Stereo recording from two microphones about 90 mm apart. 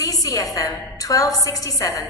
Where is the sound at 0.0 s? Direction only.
40° left (ahead or behind).